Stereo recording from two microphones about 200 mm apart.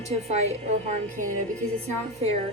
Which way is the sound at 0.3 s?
35° right (ahead or behind).